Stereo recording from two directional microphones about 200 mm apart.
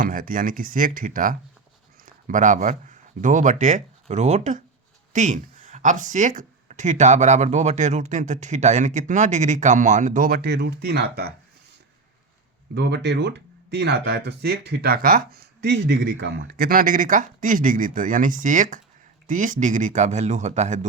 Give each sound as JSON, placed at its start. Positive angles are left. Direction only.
{"t": 0.0, "sound": "speech", "side_deg": -45}
{"t": 12.7, "sound": "speech", "side_deg": -60}